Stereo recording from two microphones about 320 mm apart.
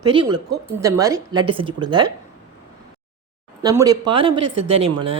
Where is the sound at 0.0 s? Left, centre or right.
Centre.